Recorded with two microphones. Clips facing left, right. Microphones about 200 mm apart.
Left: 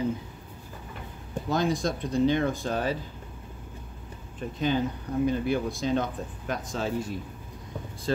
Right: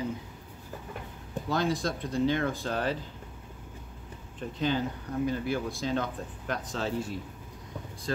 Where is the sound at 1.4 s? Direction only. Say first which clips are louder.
Left 3 dB; 15° left (ahead or behind).